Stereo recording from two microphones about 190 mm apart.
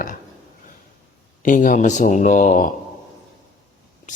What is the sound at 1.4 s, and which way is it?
Speech, 45° left (ahead or behind).